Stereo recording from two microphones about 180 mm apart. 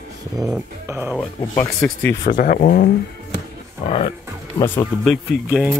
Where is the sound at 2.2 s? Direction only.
50° left (ahead or behind).